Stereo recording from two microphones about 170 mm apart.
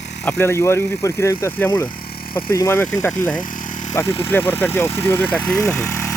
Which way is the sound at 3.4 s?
50° left (ahead or behind).